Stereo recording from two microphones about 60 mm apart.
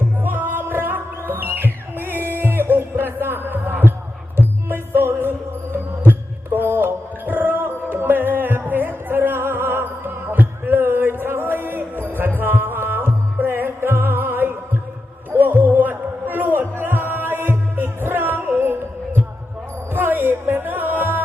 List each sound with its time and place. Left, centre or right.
0.2 s music: right